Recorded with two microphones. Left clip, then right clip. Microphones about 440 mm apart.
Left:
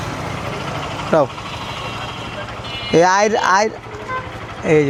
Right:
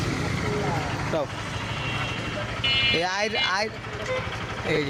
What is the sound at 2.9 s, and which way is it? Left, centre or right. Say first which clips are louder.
Speech: left 12 dB; left.